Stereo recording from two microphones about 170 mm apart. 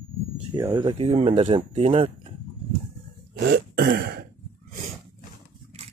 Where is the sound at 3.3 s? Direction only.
80° right; by 4.3 s 65° right (ahead or behind).